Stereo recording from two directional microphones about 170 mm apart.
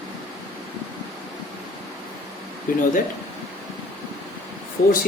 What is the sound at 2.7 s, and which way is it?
Speech, 55° left (ahead or behind).